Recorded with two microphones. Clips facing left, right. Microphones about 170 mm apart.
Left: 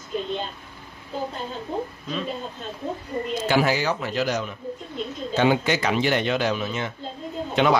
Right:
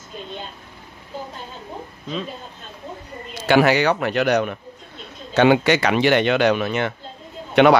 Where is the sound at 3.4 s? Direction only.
70° right (ahead or behind).